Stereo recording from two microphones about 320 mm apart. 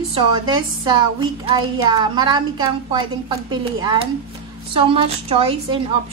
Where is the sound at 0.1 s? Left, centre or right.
Centre.